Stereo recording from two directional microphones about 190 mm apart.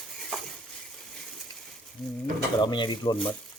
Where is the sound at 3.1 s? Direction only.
5° left (ahead or behind).